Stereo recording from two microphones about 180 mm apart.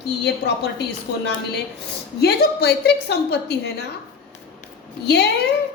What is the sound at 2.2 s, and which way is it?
A woman's voice, 65° left (ahead or behind).